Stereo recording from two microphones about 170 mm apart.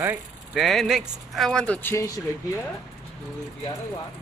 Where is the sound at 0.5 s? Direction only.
Centre (ahead or behind); by 2.2 s 15° left (ahead or behind).